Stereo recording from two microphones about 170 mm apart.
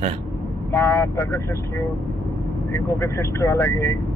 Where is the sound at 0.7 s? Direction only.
15° left (ahead or behind).